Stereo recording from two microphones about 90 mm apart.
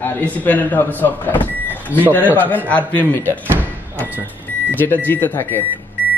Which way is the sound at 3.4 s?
25° right (ahead or behind).